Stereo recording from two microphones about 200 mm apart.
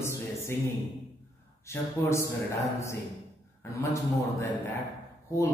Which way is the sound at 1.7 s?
15° left (ahead or behind).